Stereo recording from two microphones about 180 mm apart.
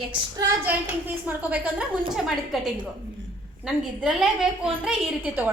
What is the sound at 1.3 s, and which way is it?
A woman's voice, 10° right (ahead or behind).